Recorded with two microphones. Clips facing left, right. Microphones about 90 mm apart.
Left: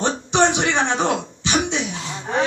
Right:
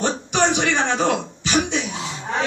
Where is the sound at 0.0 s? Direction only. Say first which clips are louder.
Left 2 dB; 20° left (ahead or behind).